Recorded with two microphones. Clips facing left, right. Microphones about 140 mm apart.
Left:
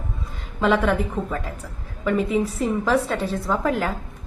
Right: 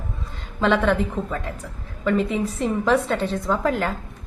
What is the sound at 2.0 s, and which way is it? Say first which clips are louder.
A woman's voice: even; 5° left (ahead or behind).